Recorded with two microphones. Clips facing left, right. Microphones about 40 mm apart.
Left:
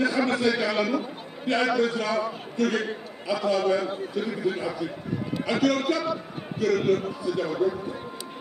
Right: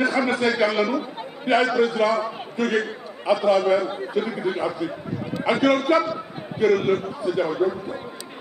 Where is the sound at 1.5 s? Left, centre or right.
Right.